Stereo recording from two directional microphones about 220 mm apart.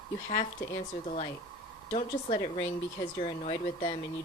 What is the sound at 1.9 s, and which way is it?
Speech, 30° left (ahead or behind).